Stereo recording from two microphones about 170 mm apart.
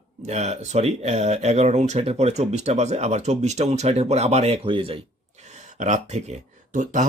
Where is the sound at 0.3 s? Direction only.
40° right (ahead or behind).